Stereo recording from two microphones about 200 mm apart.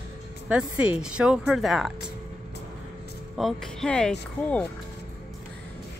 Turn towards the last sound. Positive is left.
turn(degrees=5)  # may be behind; listen again after turning